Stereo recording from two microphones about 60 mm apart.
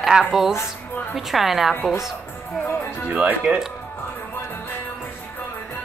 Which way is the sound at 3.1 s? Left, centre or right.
Centre.